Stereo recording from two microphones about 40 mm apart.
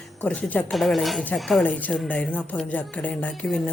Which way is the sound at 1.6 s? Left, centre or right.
Left.